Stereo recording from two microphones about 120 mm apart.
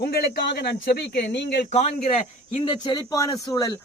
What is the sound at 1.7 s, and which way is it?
Speech, 65° left (ahead or behind).